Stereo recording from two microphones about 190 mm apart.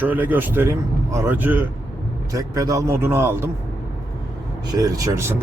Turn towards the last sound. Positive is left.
turn(degrees=-15)  # may be behind; listen again after turning